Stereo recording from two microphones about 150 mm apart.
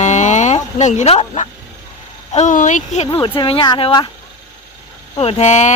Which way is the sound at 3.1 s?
35° left (ahead or behind).